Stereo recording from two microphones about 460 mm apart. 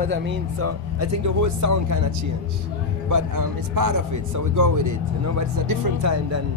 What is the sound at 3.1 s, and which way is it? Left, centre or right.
Speech, right.